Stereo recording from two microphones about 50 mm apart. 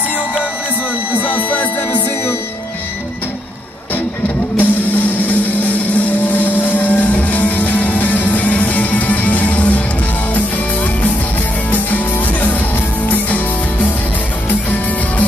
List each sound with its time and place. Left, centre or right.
1.1 s music: left
4.6 s music: left
11.7 s music: left